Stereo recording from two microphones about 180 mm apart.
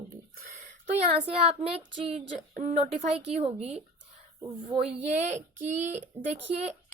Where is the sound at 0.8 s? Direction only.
35° right (ahead or behind).